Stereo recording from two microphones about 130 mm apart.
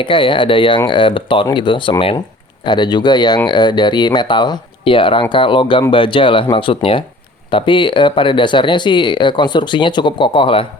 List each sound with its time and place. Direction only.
0.0 s speech: 40° left (ahead or behind)